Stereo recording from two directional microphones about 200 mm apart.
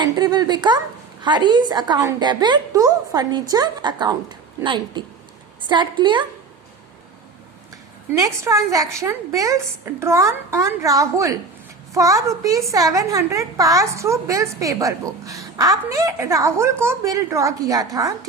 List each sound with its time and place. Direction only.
0.0 s a woman's voice: 20° right (ahead or behind)
8.1 s a woman's voice: 15° right (ahead or behind)